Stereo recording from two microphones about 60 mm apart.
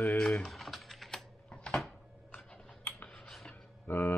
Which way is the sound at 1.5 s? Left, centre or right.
Centre.